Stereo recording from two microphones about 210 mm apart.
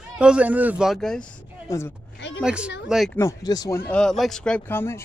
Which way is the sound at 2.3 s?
5° right (ahead or behind).